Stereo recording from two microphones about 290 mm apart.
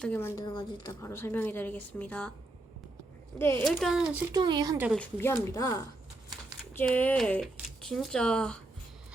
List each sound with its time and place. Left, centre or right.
0.0 s speech: centre
3.3 s speech: centre
4.9 s speech: centre